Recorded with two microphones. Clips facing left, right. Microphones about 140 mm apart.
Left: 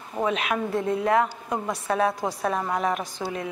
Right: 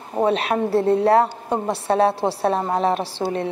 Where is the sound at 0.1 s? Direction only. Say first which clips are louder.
Right 6 dB; 35° right (ahead or behind).